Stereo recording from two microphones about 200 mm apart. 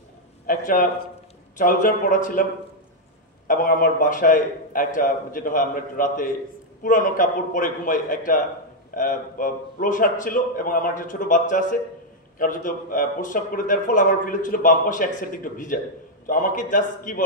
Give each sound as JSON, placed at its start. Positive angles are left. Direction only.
{"t": 0.5, "sound": "a man's voice", "side_deg": 40}
{"t": 3.4, "sound": "a man's voice", "side_deg": 45}